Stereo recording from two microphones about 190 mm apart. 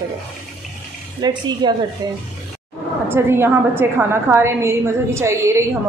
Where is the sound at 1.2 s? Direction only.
20° right (ahead or behind).